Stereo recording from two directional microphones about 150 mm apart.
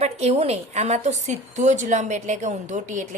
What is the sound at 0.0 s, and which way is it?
A woman's voice, 45° right (ahead or behind).